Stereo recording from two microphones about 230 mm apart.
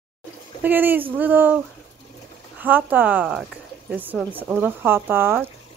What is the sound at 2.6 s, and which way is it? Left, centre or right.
Speech, centre.